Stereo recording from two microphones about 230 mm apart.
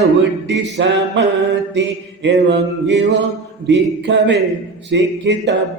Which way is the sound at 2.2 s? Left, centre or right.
Right.